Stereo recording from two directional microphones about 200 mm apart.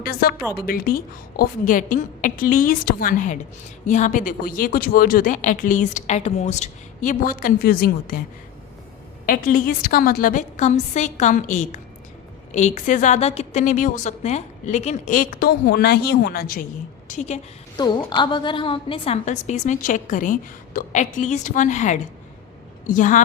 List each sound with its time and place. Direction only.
0.0 s a sound: 50° left (ahead or behind)
0.5 s a woman's voice: 50° left (ahead or behind)
9.2 s speech: 45° left (ahead or behind)
17.1 s speech: 35° left (ahead or behind)
17.7 s speech: 20° left (ahead or behind); by 23.2 s 40° left (ahead or behind)